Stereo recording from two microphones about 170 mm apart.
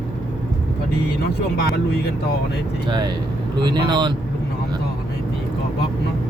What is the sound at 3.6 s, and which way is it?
Speech, 25° right (ahead or behind).